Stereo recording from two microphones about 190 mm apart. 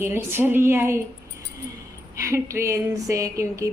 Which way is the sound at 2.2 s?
15° right (ahead or behind).